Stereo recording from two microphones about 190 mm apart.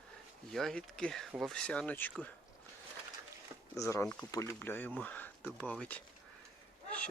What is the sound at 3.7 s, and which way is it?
Speech, 15° left (ahead or behind).